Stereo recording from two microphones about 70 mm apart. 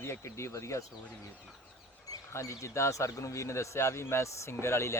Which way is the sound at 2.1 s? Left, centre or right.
Left.